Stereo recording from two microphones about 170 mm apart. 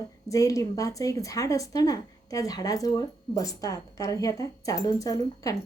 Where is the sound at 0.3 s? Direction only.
20° left (ahead or behind).